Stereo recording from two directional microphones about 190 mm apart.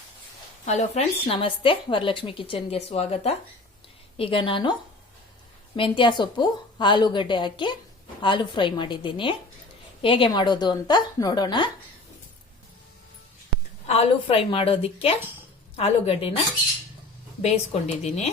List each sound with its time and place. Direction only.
0.6 s a woman's voice: 40° left (ahead or behind)
5.7 s a woman's voice: 25° left (ahead or behind)
13.8 s a woman's voice: 30° left (ahead or behind)
17.4 s a woman's voice: 35° left (ahead or behind)